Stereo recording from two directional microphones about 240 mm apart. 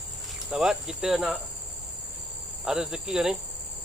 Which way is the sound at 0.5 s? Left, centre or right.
Centre.